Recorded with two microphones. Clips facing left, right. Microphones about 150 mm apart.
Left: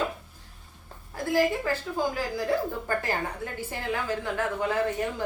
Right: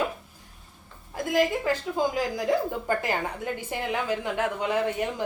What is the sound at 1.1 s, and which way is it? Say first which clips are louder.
A woman's voice: even; 15° right (ahead or behind).